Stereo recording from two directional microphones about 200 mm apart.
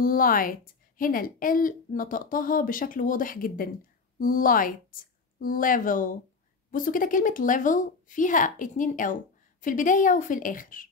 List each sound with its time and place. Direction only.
0.0 s a woman's voice: 45° left (ahead or behind)